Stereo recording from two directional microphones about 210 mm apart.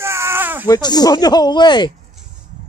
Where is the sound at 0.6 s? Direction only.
15° left (ahead or behind).